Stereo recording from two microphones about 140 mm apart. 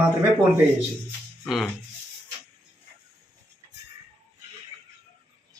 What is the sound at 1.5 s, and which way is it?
Speech, centre (ahead or behind).